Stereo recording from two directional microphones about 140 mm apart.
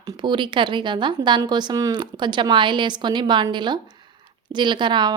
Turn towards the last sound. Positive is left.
turn(degrees=-35)  # may be behind; listen again after turning